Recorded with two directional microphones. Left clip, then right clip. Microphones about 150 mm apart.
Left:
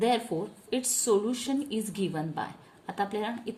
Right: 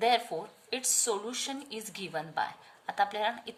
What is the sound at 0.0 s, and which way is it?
A woman's voice, 30° right (ahead or behind).